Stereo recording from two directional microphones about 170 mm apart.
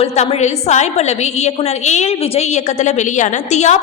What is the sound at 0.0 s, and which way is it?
A woman's voice, 40° left (ahead or behind).